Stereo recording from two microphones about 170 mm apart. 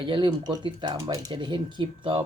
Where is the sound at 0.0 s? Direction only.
30° right (ahead or behind).